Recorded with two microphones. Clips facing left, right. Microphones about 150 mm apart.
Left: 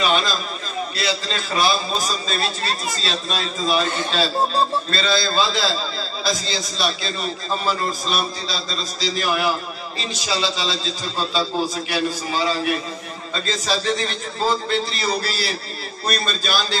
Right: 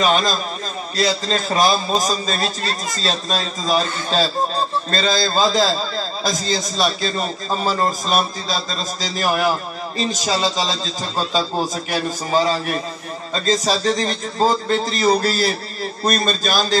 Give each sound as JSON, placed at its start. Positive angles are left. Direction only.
{"t": 0.0, "sound": "a man's voice", "side_deg": -40}